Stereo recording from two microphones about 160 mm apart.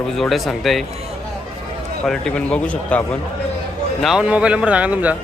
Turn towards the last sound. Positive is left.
turn(degrees=-10)  # may be behind; listen again after turning